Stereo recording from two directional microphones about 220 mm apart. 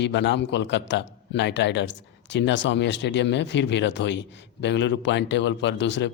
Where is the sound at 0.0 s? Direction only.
55° left (ahead or behind).